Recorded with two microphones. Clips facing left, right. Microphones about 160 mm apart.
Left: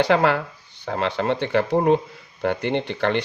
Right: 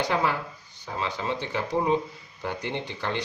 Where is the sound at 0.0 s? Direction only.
70° left (ahead or behind).